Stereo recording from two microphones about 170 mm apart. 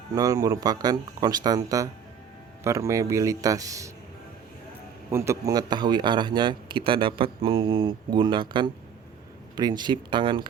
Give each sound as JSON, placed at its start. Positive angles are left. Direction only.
{"t": 0.1, "sound": "a man's voice", "side_deg": -20}
{"t": 5.1, "sound": "a man's voice", "side_deg": -15}